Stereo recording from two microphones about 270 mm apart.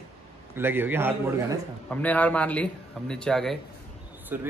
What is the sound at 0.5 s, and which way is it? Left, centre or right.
A man's voice, centre.